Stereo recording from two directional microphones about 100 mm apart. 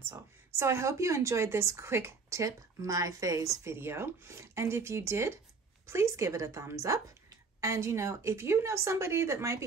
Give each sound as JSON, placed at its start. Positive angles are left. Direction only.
{"t": 0.0, "sound": "a woman's voice", "side_deg": -25}